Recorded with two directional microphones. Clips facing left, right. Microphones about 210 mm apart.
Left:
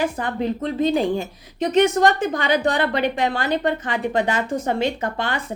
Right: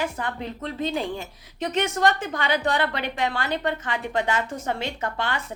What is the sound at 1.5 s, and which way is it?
Speech, 15° left (ahead or behind).